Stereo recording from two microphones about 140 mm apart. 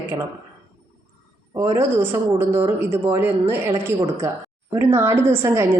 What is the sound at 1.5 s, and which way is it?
A woman's voice, 20° right (ahead or behind).